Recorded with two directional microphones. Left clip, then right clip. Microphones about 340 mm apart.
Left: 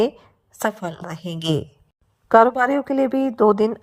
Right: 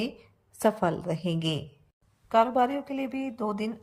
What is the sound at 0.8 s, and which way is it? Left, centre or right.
Speech, centre.